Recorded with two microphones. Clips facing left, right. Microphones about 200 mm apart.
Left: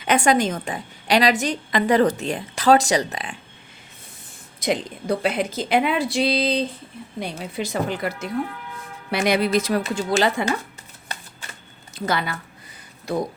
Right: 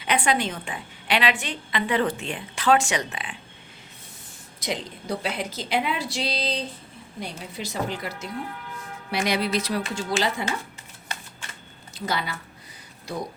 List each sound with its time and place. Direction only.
0.0 s a woman's voice: 45° left (ahead or behind)
4.6 s speech: 55° left (ahead or behind)
11.9 s speech: 55° left (ahead or behind)